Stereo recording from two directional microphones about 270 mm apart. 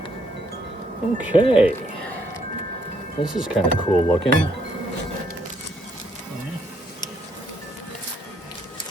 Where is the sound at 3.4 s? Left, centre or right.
Centre.